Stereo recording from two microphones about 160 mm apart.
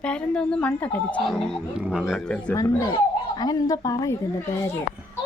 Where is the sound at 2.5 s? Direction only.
25° left (ahead or behind).